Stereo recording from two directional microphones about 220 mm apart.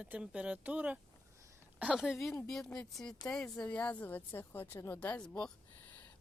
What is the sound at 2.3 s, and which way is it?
A woman's voice, 5° left (ahead or behind).